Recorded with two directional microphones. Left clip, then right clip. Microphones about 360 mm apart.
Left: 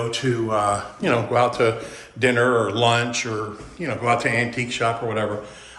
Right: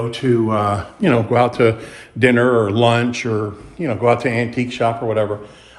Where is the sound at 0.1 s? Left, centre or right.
Right.